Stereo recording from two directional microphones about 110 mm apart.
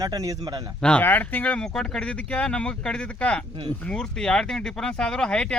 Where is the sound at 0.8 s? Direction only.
15° left (ahead or behind).